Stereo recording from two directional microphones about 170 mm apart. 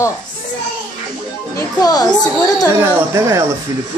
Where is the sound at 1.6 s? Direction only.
20° left (ahead or behind).